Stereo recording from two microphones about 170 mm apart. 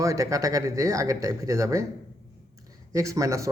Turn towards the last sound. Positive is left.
turn(degrees=-20)  # may be behind; listen again after turning